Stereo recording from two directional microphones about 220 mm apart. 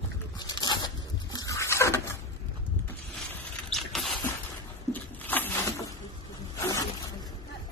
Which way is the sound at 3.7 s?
Centre (ahead or behind).